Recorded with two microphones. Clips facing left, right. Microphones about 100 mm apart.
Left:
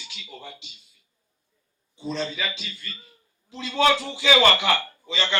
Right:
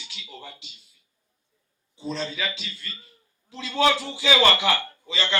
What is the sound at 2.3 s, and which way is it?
Speech, 5° right (ahead or behind).